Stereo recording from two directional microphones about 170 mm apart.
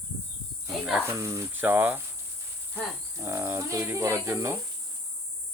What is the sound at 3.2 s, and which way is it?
Speech, 15° right (ahead or behind).